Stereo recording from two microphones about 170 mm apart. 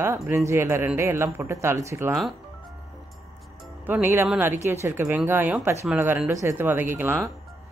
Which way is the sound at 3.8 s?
15° right (ahead or behind).